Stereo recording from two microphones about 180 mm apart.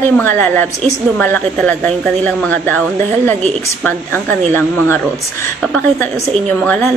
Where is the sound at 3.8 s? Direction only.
5° left (ahead or behind).